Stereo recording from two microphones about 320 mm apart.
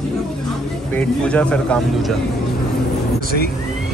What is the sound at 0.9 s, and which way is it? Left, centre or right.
Speech, centre.